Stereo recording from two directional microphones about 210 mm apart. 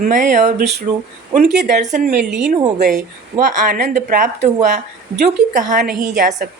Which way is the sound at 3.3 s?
35° right (ahead or behind).